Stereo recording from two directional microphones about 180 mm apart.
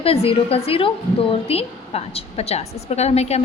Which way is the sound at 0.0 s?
35° left (ahead or behind).